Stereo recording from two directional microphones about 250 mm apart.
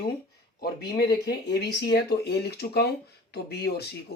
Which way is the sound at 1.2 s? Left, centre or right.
Left.